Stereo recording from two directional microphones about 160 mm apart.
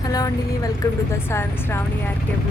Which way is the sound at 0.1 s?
25° left (ahead or behind).